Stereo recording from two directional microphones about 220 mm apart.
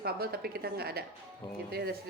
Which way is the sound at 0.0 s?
45° right (ahead or behind).